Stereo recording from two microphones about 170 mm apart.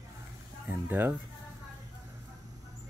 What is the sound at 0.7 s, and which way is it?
Speech, 10° right (ahead or behind).